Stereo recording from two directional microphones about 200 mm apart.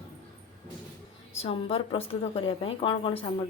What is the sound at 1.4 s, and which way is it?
A woman's voice, 25° left (ahead or behind).